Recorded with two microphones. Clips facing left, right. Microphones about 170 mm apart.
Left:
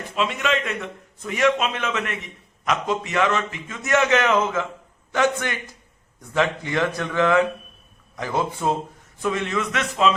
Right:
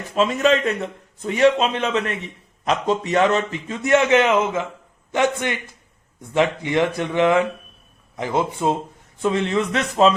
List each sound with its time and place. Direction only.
0.1 s a man's voice: 40° right (ahead or behind)